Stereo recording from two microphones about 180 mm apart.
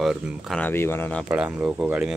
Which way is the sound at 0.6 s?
10° left (ahead or behind).